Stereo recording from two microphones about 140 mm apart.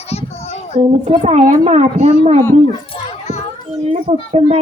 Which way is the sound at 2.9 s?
40° left (ahead or behind).